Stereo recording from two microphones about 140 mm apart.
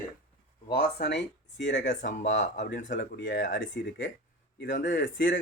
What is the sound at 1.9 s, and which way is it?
Speech, 65° left (ahead or behind).